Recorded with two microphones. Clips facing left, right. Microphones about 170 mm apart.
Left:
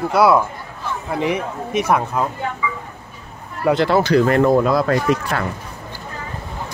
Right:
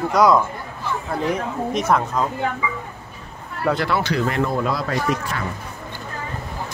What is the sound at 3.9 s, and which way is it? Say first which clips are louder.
Speech: left 7 dB; 40° left (ahead or behind).